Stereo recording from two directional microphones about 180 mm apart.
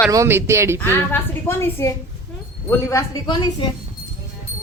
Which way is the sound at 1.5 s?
15° left (ahead or behind).